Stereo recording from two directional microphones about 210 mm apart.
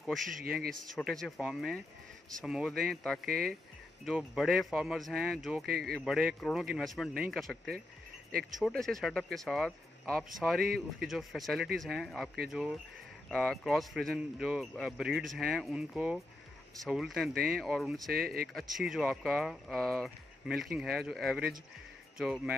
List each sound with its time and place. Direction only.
0.0 s speech: centre (ahead or behind)
0.4 s speech: 45° right (ahead or behind)
0.9 s speech: centre (ahead or behind)
10.6 s speech: 45° right (ahead or behind)
11.1 s speech: centre (ahead or behind)
18.1 s speech: 45° right (ahead or behind)
18.5 s speech: centre (ahead or behind)